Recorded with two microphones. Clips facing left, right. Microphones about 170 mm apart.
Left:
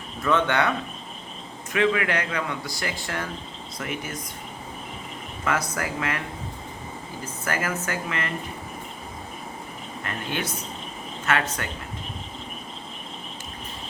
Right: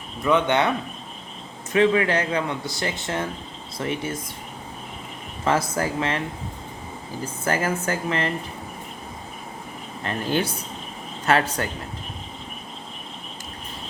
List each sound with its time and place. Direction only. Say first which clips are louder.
0.2 s speech: right 2 dB; 15° right (ahead or behind)
1.7 s speech: right 4 dB; 30° right (ahead or behind)
5.5 s speech: right 4 dB; 30° right (ahead or behind)
7.4 s speech: right 4 dB; 30° right (ahead or behind)
10.0 s speech: right 6 dB; 30° right (ahead or behind)